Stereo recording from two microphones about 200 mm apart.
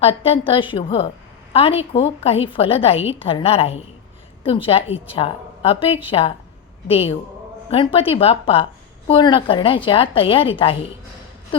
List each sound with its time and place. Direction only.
0.2 s a woman's voice: 25° left (ahead or behind)